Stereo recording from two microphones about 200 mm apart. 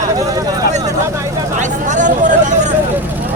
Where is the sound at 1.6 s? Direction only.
40° right (ahead or behind).